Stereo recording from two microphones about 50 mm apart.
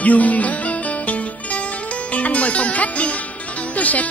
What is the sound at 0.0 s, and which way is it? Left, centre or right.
Music, left.